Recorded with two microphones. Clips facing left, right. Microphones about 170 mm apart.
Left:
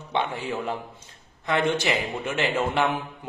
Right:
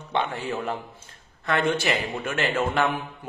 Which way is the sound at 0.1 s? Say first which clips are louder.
Even; 15° left (ahead or behind).